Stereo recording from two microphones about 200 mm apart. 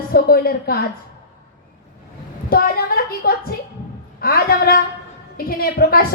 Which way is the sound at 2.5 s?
50° left (ahead or behind).